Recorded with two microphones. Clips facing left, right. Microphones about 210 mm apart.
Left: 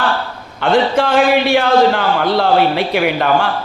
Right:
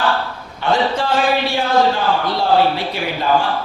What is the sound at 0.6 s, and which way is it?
A man's voice, 60° left (ahead or behind).